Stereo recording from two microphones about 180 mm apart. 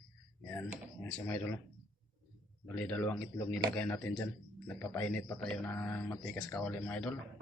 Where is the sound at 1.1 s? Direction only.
10° left (ahead or behind).